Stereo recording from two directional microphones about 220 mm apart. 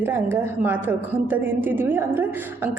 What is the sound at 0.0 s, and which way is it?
Speech, 10° right (ahead or behind).